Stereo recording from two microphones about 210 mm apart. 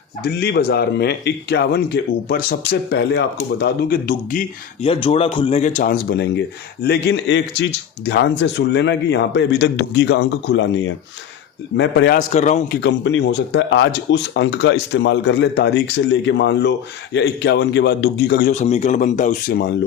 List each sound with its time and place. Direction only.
0.2 s a man's voice: 50° left (ahead or behind)
4.9 s a man's voice: 25° left (ahead or behind); by 12.2 s 55° left (ahead or behind)
12.3 s speech: 35° left (ahead or behind)
12.8 s a man's voice: 55° left (ahead or behind)
18.5 s speech: 35° left (ahead or behind)